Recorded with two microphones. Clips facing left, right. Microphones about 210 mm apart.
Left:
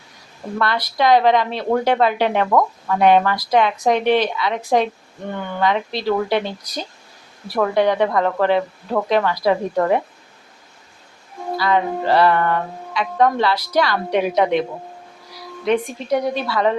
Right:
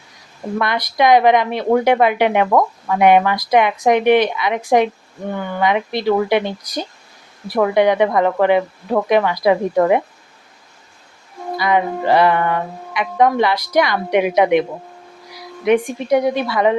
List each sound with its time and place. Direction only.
0.6 s speech: 15° right (ahead or behind)
11.5 s speech: 15° right (ahead or behind)
15.6 s speech: 15° right (ahead or behind)